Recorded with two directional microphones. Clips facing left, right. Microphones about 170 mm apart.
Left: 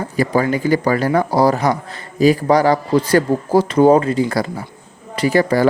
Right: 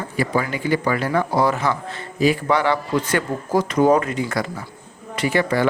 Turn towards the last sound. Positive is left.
turn(degrees=40)  # may be behind; listen again after turning